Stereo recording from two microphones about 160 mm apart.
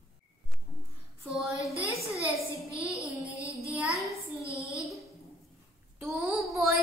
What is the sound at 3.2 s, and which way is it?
Music, 20° left (ahead or behind).